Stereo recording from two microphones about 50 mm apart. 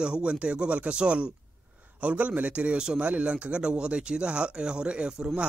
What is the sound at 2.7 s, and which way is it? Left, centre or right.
Speech, centre.